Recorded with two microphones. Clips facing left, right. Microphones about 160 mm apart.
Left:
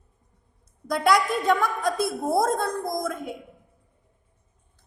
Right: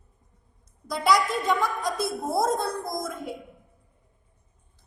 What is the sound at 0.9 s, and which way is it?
A woman's voice, 55° left (ahead or behind).